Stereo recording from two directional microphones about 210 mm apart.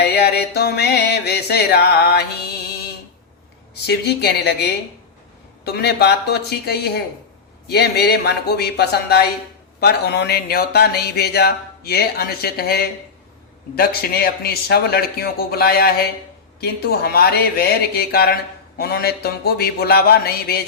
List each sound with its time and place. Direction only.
0.0 s speech: 50° left (ahead or behind)
3.8 s speech: 50° left (ahead or behind)